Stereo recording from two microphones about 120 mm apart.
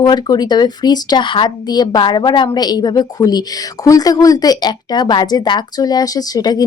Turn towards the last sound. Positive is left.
turn(degrees=30)  # may be behind; listen again after turning